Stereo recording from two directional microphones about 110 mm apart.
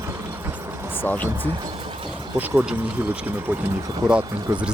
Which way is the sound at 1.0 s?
15° left (ahead or behind).